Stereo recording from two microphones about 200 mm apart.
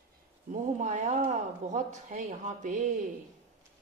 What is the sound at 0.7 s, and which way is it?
A woman's voice, 40° right (ahead or behind).